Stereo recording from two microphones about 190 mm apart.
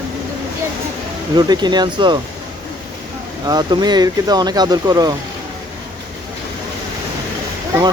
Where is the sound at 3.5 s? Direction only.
20° right (ahead or behind).